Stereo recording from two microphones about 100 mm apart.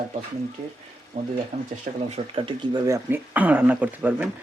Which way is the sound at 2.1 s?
60° right (ahead or behind).